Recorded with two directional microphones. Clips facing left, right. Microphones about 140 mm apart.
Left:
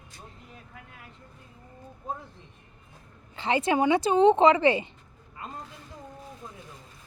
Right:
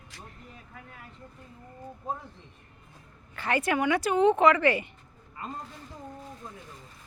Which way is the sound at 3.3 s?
20° left (ahead or behind).